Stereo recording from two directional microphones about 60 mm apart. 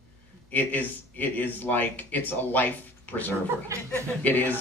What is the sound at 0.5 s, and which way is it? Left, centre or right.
A man's voice, left.